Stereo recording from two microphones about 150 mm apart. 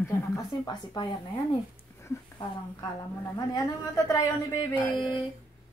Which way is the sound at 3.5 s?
25° left (ahead or behind).